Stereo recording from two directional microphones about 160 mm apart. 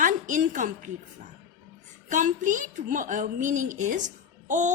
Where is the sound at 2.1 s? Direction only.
55° right (ahead or behind).